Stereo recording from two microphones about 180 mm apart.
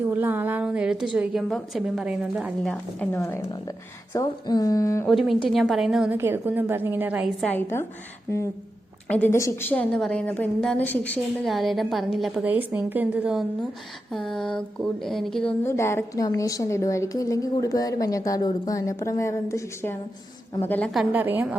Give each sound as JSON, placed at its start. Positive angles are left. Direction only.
{"t": 0.1, "sound": "a woman's voice", "side_deg": -10}
{"t": 3.0, "sound": "a woman's voice", "side_deg": 10}
{"t": 5.0, "sound": "a woman's voice", "side_deg": 0}
{"t": 6.1, "sound": "a woman's voice", "side_deg": -15}
{"t": 7.4, "sound": "a woman's voice", "side_deg": 10}
{"t": 9.0, "sound": "a woman's voice", "side_deg": 10}
{"t": 15.6, "sound": "a woman's voice", "side_deg": 15}